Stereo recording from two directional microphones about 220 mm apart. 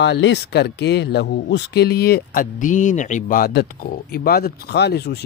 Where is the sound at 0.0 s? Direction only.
50° left (ahead or behind).